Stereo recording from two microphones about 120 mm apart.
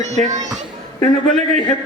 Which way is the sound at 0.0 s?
75° right (ahead or behind).